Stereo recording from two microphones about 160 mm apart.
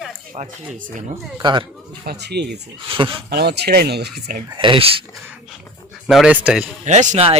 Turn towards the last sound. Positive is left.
turn(degrees=-40)  # may be behind; listen again after turning